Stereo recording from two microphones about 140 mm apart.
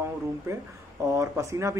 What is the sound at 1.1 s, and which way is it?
Speech, 20° right (ahead or behind).